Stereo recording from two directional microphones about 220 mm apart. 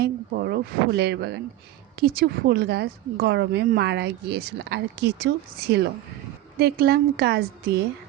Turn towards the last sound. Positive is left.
turn(degrees=-45)  # may be behind; listen again after turning